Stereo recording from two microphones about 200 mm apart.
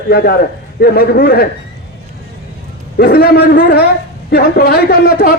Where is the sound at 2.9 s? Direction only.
50° left (ahead or behind).